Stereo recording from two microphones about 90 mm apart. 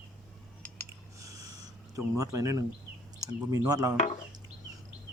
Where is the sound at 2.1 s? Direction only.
35° right (ahead or behind).